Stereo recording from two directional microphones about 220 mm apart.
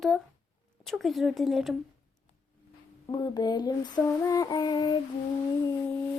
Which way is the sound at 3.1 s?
20° left (ahead or behind).